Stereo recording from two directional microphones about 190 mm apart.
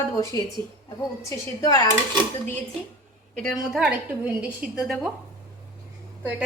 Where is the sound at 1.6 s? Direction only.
20° left (ahead or behind).